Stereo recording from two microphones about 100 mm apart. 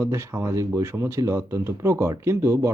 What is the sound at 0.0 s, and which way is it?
Speech, 25° right (ahead or behind).